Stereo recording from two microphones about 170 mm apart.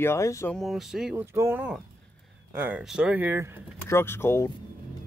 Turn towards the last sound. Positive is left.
turn(degrees=15)  # may be behind; listen again after turning